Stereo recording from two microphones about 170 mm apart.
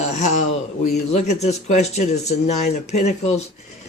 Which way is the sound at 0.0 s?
45° left (ahead or behind).